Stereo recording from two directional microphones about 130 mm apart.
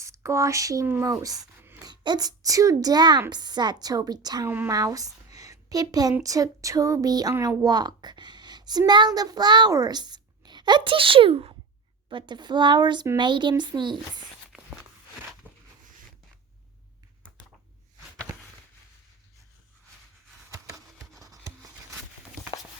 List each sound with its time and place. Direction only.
0.0 s speech: 25° right (ahead or behind)
1.5 s a sound: 15° right (ahead or behind)
1.8 s a woman's voice: 30° right (ahead or behind)
4.4 s a woman's voice: 15° right (ahead or behind)
4.7 s a woman's voice: 25° right (ahead or behind)
7.3 s speech: 20° right (ahead or behind)
7.6 s a woman's voice: 30° right (ahead or behind)
15.4 s a sound: 15° left (ahead or behind)
20.5 s a sound: 25° right (ahead or behind)